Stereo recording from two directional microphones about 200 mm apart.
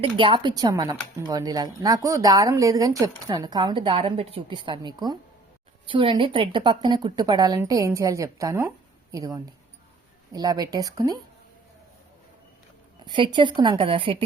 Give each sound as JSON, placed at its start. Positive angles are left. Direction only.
{"t": 0.0, "sound": "speech", "side_deg": -25}
{"t": 13.1, "sound": "speech", "side_deg": -25}